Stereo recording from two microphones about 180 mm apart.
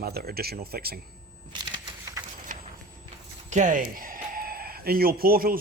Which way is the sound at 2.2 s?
20° right (ahead or behind).